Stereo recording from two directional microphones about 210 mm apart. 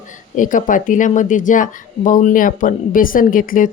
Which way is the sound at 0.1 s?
40° left (ahead or behind).